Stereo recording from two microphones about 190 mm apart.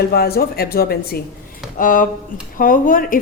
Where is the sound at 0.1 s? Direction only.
55° left (ahead or behind).